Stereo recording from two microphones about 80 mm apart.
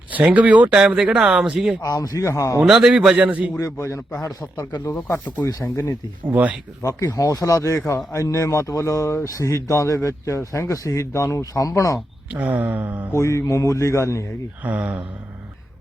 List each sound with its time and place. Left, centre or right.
0.1 s speech: centre
1.8 s speech: left
2.6 s speech: centre
3.6 s speech: left
4.2 s a man's voice: left
5.7 s speech: left
6.2 s speech: centre
6.8 s speech: left
12.3 s speech: centre
13.1 s speech: left
14.6 s speech: centre